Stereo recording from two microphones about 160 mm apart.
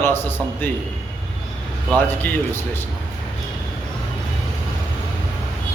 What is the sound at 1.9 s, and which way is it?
Speech, 10° left (ahead or behind).